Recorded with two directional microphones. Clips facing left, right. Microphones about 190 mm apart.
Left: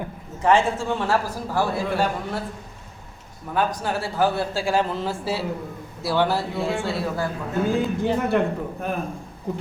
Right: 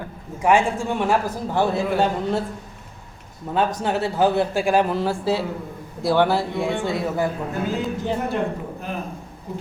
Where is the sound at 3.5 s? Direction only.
20° right (ahead or behind).